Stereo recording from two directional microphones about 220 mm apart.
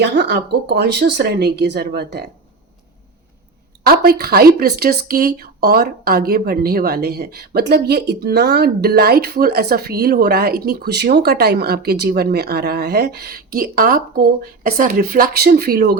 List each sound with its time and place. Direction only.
0.0 s speech: 50° right (ahead or behind)
4.0 s speech: 45° right (ahead or behind)